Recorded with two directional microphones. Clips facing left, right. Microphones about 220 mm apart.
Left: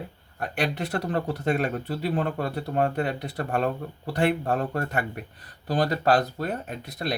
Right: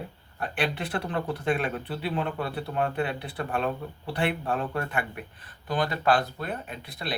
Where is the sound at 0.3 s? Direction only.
45° left (ahead or behind).